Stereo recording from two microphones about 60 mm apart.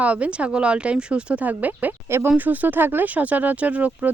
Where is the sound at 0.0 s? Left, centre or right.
Right.